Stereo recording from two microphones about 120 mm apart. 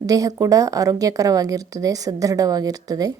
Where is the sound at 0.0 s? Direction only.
30° right (ahead or behind).